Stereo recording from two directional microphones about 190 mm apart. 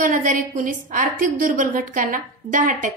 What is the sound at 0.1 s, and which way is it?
A woman's voice, 45° right (ahead or behind).